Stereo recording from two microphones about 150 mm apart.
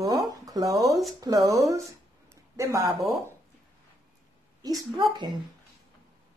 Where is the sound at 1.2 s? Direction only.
25° right (ahead or behind).